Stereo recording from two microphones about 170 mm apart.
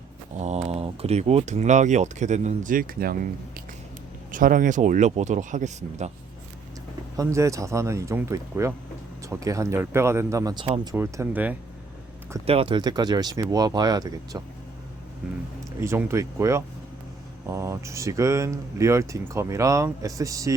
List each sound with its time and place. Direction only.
0.3 s speech: 40° right (ahead or behind); by 3.2 s 60° right (ahead or behind)
4.3 s speech: 50° right (ahead or behind)
7.2 s speech: 20° right (ahead or behind)
10.9 s speech: 10° right (ahead or behind)
12.5 s speech: 30° right (ahead or behind)
15.8 s speech: 15° right (ahead or behind)